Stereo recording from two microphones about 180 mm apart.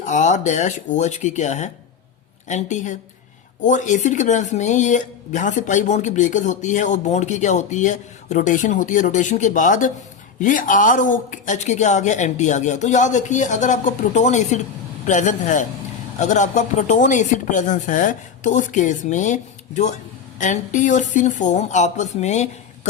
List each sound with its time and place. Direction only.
0.0 s speech: 40° left (ahead or behind)